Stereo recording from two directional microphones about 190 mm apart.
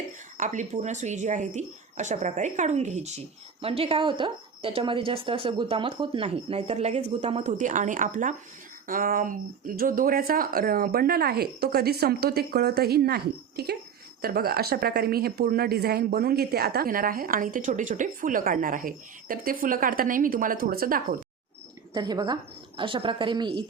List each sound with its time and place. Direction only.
0.3 s a woman's voice: 40° right (ahead or behind)
21.9 s a woman's voice: 20° right (ahead or behind)